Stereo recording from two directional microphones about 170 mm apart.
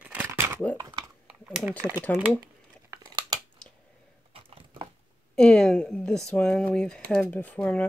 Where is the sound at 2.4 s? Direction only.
25° right (ahead or behind).